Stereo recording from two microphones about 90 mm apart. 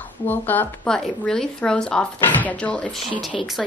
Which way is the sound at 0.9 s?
5° left (ahead or behind).